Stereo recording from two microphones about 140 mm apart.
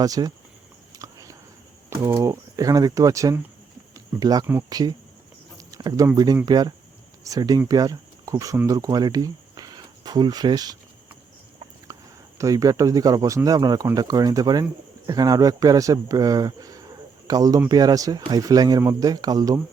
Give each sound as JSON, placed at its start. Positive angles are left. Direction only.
{"t": 0.0, "sound": "speech", "side_deg": -25}
{"t": 0.9, "sound": "a sound", "side_deg": -25}
{"t": 1.9, "sound": "speech", "side_deg": -20}
{"t": 3.9, "sound": "cricket", "side_deg": -25}
{"t": 4.7, "sound": "speech", "side_deg": -30}
{"t": 5.5, "sound": "cricket", "side_deg": -25}
{"t": 6.1, "sound": "speech", "side_deg": -30}
{"t": 11.9, "sound": "a sound", "side_deg": -20}
{"t": 12.4, "sound": "speech", "side_deg": -25}